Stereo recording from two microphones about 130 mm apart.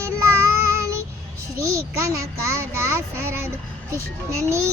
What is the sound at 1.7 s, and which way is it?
Speech, 25° right (ahead or behind).